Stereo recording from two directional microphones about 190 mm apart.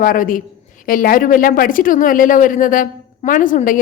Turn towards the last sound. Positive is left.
turn(degrees=45)  # may be behind; listen again after turning